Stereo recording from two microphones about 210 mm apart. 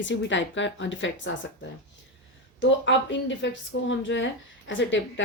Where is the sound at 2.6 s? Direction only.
60° left (ahead or behind).